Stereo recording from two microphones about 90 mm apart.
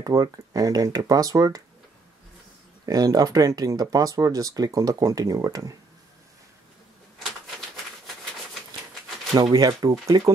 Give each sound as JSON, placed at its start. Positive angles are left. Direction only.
{"t": 0.0, "sound": "speech", "side_deg": -45}
{"t": 2.9, "sound": "speech", "side_deg": -45}
{"t": 9.3, "sound": "speech", "side_deg": -45}